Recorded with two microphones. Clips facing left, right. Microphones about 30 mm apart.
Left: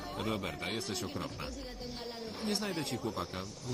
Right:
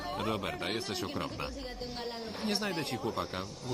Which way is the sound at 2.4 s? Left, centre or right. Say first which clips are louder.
Right 2 dB; right.